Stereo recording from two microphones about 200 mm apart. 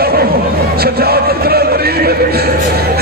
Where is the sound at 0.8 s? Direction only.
50° right (ahead or behind).